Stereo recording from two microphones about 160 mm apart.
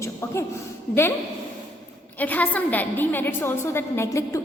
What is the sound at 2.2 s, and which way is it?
A woman's voice, 10° left (ahead or behind).